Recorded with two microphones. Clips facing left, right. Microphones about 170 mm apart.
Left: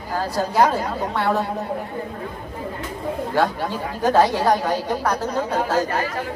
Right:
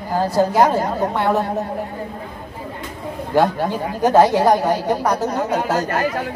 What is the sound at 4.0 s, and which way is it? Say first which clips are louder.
A woman's voice: right 4 dB; 10° right (ahead or behind).